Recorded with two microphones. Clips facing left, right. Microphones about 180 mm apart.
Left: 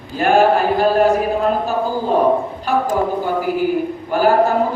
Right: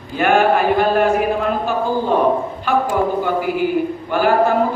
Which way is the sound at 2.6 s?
40° left (ahead or behind).